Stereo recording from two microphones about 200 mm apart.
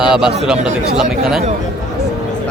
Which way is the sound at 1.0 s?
Centre (ahead or behind).